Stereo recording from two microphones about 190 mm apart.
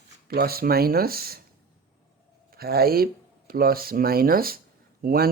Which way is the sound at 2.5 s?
55° right (ahead or behind).